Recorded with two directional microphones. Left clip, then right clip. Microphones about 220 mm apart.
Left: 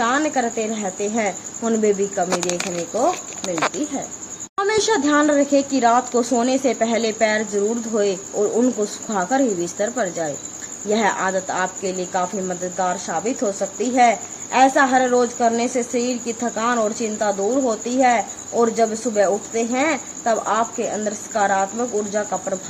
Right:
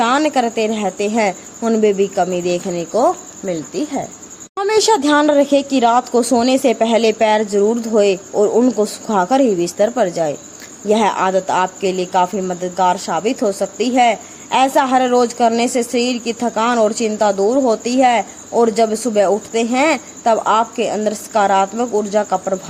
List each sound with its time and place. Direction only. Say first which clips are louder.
0.0 s speech: right 5 dB; 25° right (ahead or behind)
4.5 s speech: right 5 dB; 20° right (ahead or behind)